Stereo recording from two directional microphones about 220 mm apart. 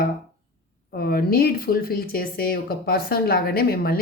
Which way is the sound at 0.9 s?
45° left (ahead or behind).